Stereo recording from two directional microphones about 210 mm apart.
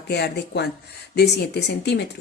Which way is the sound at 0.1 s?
50° left (ahead or behind).